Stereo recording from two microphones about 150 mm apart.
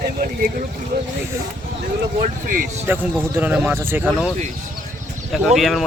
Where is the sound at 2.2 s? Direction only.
65° right (ahead or behind).